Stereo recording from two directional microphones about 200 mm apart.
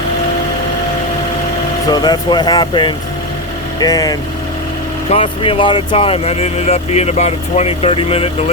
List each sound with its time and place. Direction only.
1.9 s speech: 20° left (ahead or behind)